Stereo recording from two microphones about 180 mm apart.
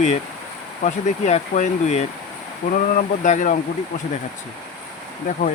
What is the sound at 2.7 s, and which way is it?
Speech, 50° left (ahead or behind).